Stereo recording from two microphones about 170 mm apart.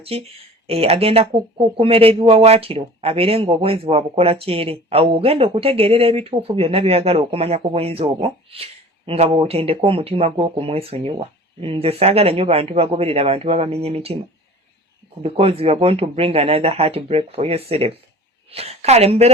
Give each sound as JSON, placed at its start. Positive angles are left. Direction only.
{"t": 0.0, "sound": "speech", "side_deg": -35}
{"t": 15.2, "sound": "speech", "side_deg": -35}